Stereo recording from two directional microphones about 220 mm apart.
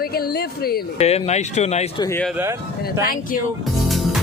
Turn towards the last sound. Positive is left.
turn(degrees=0)  # may be behind; listen again after turning